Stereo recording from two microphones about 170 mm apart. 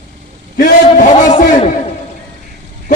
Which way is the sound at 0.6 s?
50° left (ahead or behind).